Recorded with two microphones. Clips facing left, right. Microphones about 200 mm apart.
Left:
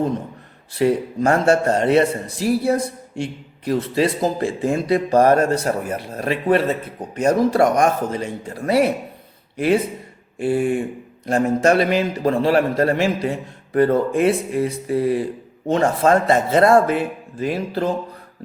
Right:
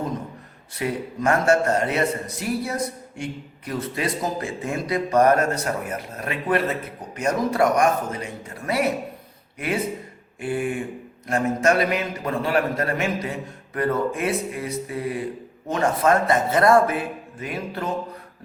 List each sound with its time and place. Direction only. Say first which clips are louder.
0.8 s a man's voice: left 8 dB; 30° left (ahead or behind)
10.3 s a man's voice: left 6 dB; 30° left (ahead or behind)